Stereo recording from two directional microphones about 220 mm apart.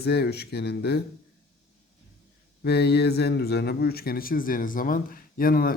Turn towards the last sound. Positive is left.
turn(degrees=40)  # may be behind; listen again after turning